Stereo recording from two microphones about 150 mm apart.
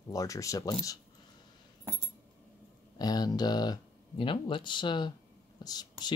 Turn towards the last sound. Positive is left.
turn(degrees=30)  # may be behind; listen again after turning